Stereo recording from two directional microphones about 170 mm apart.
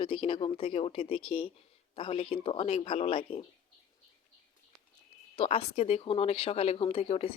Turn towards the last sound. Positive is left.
turn(degrees=35)  # may be behind; listen again after turning